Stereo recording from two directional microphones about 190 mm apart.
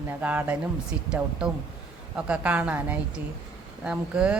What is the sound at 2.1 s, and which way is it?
Speech, 5° right (ahead or behind).